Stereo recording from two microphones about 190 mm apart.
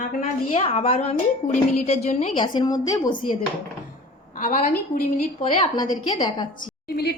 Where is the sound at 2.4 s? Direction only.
25° left (ahead or behind).